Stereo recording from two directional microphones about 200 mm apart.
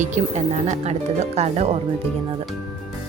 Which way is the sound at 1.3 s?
30° right (ahead or behind).